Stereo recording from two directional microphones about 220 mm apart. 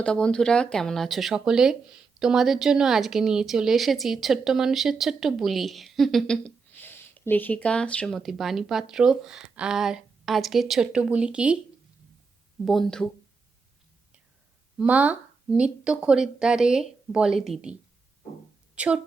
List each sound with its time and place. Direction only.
0.0 s speech: 5° left (ahead or behind)
12.6 s speech: centre (ahead or behind)
14.8 s speech: 5° right (ahead or behind)